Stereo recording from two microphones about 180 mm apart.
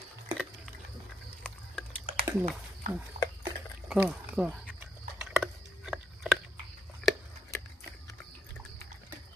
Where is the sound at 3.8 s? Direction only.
5° right (ahead or behind).